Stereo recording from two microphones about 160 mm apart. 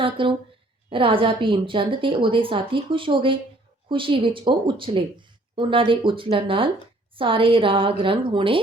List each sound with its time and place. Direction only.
0.0 s a woman's voice: 30° right (ahead or behind)